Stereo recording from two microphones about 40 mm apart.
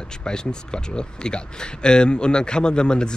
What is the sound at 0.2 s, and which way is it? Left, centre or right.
Speech, left.